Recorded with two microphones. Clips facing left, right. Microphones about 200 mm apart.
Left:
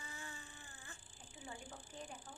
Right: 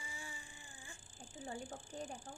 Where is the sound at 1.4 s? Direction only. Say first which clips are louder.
Right 6 dB; 45° right (ahead or behind).